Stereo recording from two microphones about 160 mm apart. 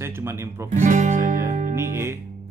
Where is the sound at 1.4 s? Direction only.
55° right (ahead or behind).